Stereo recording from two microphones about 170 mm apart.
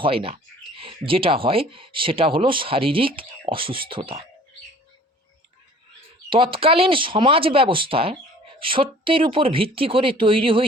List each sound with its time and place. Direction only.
0.0 s speech: 30° right (ahead or behind)
6.3 s speech: 30° right (ahead or behind)